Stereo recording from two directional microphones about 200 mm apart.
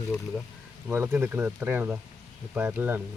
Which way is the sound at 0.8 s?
10° right (ahead or behind).